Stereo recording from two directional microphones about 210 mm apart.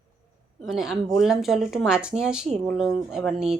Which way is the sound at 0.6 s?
Centre (ahead or behind).